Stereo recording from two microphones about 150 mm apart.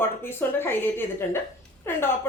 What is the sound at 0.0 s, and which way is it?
A woman's voice, 15° left (ahead or behind).